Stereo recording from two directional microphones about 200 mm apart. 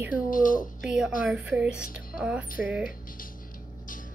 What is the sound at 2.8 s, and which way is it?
Music, 45° left (ahead or behind).